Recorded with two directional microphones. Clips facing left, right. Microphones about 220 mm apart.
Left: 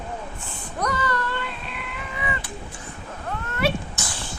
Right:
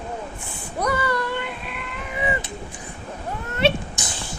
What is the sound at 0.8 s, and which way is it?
Female singing, 10° right (ahead or behind).